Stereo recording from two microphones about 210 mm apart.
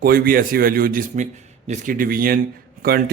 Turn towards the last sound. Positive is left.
turn(degrees=-45)  # may be behind; listen again after turning